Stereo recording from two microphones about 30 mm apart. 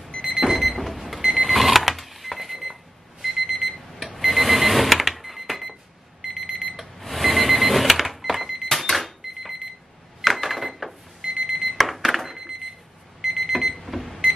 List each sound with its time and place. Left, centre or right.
0.4 s alarm clock: centre
1.3 s a sound: centre
5.1 s cash register: centre
6.2 s alarm clock: centre
6.8 s alarm clock: centre
8.6 s cash register: centre
8.9 s cash register: centre
10.2 s a sound: centre
11.4 s alarm clock: centre
11.7 s alarm clock: centre